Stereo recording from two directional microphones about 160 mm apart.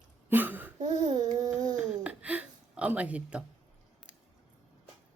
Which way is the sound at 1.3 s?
25° right (ahead or behind).